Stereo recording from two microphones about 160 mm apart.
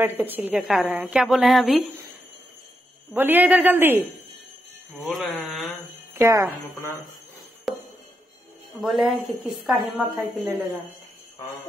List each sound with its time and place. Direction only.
0.2 s a woman's voice: 10° right (ahead or behind)
3.1 s a man's voice: 10° right (ahead or behind)
4.9 s a woman's voice: centre (ahead or behind)
6.1 s a man's voice: 15° right (ahead or behind)
7.7 s music: centre (ahead or behind)
8.7 s a woman's voice: centre (ahead or behind)